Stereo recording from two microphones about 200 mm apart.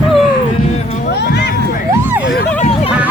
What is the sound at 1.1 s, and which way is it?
Run, 55° left (ahead or behind).